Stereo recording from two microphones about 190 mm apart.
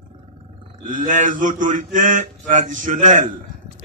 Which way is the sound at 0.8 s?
40° right (ahead or behind).